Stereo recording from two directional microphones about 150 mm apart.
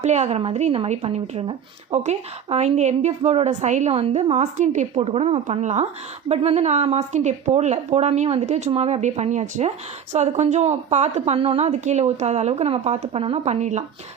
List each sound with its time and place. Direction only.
0.0 s speech: 50° right (ahead or behind)